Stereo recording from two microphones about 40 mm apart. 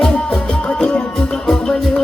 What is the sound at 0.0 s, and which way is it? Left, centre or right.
Music, left.